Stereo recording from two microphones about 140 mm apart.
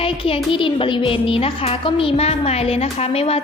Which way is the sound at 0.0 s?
40° left (ahead or behind).